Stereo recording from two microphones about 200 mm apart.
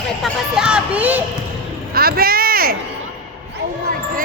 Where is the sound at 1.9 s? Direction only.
50° right (ahead or behind).